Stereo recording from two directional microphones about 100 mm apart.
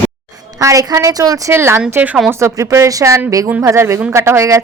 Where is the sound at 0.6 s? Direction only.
35° right (ahead or behind).